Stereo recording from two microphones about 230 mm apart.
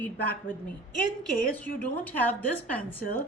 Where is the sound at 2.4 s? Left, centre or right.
Right.